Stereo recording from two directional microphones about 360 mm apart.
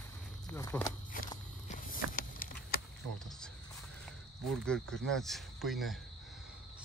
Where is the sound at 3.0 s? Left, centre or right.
Right.